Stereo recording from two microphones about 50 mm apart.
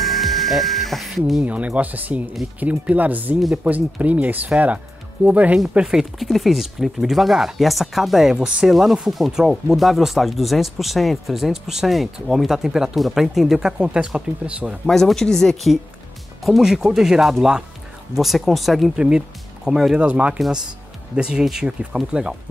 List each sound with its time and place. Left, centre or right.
0.0 s music: centre
1.4 s speech: right
5.9 s speech: centre
14.9 s speech: centre
16.4 s speech: centre
18.9 s speech: centre
20.0 s speech: right
21.2 s speech: centre